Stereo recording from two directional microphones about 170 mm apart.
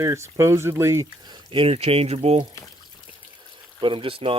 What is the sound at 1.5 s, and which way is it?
Speech, 35° right (ahead or behind).